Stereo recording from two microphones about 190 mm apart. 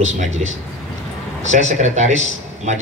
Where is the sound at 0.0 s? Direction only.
40° right (ahead or behind).